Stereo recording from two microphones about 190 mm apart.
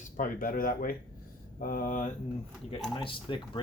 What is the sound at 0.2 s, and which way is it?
Speech, 45° left (ahead or behind).